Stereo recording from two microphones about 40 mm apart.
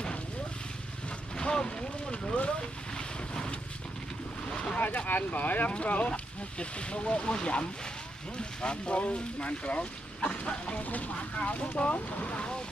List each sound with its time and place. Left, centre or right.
1.3 s vehicle: left
3.0 s boat: centre
4.7 s speech: left
10.8 s speech: left
11.1 s speech: left
11.7 s speech: left